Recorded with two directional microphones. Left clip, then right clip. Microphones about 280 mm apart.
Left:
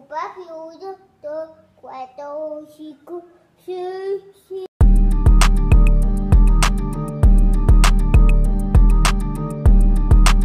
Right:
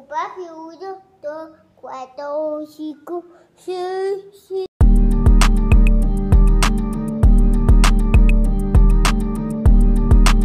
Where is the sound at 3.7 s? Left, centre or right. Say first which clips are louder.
Right 3 dB; right.